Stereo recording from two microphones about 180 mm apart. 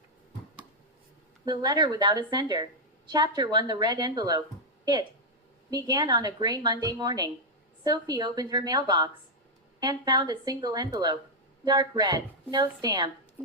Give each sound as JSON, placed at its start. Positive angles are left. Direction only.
{"t": 1.5, "sound": "a woman's voice", "side_deg": -25}
{"t": 5.7, "sound": "a woman's voice", "side_deg": -25}